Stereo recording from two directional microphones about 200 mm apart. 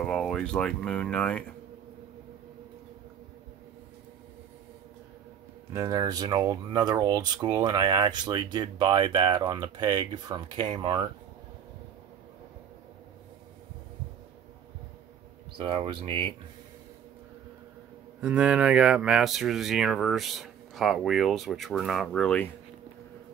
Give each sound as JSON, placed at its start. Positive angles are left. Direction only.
{"t": 0.0, "sound": "speech", "side_deg": 0}
{"t": 5.7, "sound": "speech", "side_deg": -15}
{"t": 15.5, "sound": "speech", "side_deg": -25}
{"t": 18.2, "sound": "speech", "side_deg": -5}